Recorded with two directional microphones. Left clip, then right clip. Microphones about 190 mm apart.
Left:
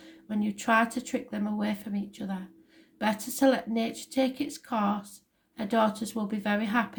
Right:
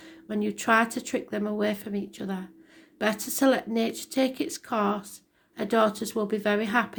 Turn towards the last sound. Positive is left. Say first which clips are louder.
# right 4 dB
turn(degrees=-35)  # may be behind; listen again after turning